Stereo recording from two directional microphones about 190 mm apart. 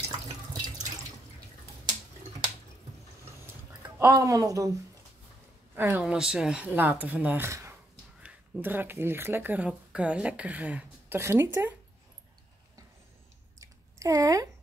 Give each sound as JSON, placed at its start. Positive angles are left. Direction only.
{"t": 4.0, "sound": "speech", "side_deg": -20}
{"t": 5.8, "sound": "speech", "side_deg": -10}
{"t": 13.6, "sound": "a sound", "side_deg": -15}